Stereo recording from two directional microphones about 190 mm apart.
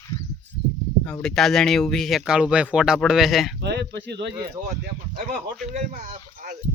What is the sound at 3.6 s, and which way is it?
Speech, 60° right (ahead or behind).